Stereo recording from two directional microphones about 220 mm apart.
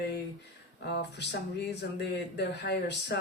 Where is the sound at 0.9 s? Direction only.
50° left (ahead or behind).